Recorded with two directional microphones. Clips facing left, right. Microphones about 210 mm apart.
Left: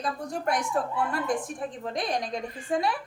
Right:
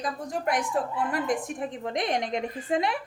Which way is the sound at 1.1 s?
20° right (ahead or behind).